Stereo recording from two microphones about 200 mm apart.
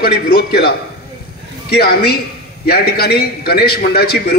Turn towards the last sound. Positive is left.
turn(degrees=50)  # may be behind; listen again after turning